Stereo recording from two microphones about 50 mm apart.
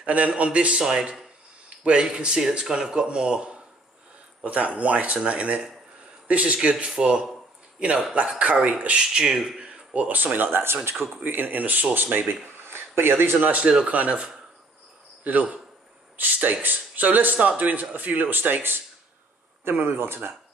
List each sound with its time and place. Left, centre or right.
0.0 s speech: right
9.0 s speech: centre
9.6 s speech: right
11.2 s speech: right
13.8 s speech: right
15.2 s speech: right